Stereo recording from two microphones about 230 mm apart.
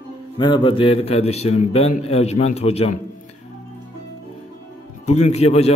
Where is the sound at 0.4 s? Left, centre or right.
Left.